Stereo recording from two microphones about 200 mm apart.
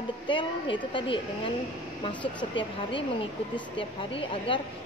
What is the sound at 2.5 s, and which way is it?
Speech, 25° left (ahead or behind).